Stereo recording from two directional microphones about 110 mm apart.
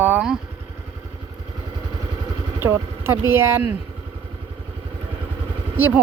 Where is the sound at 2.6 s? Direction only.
20° right (ahead or behind).